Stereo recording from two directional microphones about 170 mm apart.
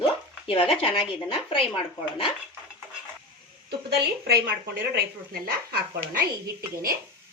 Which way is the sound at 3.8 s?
70° right (ahead or behind).